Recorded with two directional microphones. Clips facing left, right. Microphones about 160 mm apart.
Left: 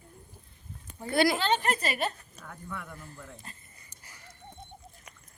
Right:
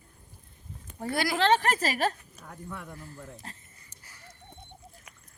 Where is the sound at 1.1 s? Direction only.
25° left (ahead or behind).